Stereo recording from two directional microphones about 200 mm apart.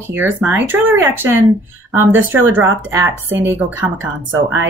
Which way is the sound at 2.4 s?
10° right (ahead or behind).